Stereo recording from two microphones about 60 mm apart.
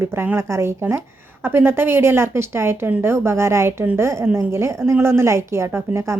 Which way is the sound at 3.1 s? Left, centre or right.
Right.